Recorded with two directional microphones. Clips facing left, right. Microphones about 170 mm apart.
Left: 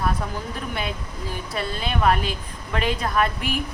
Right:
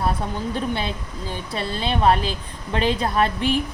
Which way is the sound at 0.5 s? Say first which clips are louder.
Right 4 dB; 30° right (ahead or behind).